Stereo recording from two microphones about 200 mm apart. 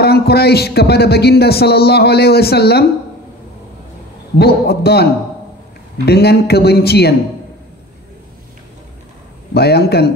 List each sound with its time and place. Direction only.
0.0 s a man's voice: 55° left (ahead or behind)
4.4 s a man's voice: 55° left (ahead or behind)
6.0 s a man's voice: 55° left (ahead or behind)
9.5 s a man's voice: 55° left (ahead or behind)